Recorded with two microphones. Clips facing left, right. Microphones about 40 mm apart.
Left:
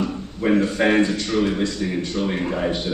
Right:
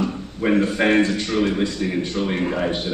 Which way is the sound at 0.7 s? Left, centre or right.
Centre.